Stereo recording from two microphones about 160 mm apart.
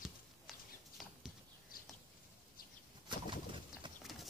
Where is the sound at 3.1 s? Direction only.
30° right (ahead or behind).